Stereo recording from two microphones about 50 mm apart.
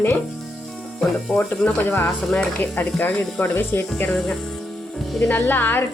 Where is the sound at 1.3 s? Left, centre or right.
Centre.